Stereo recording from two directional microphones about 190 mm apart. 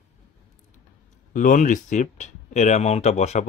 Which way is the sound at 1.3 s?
45° left (ahead or behind).